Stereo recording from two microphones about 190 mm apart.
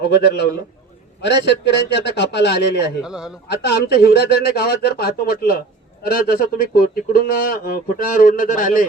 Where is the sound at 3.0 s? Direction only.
5° right (ahead or behind).